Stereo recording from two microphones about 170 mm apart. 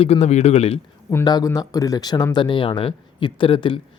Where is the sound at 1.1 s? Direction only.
25° left (ahead or behind).